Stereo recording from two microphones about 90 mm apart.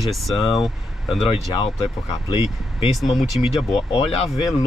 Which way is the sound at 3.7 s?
80° left.